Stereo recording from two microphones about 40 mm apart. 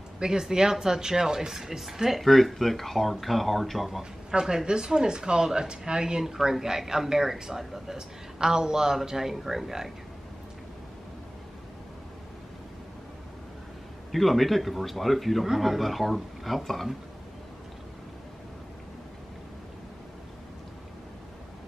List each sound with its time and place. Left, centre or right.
0.2 s speech: centre
4.3 s speech: centre
14.1 s speech: centre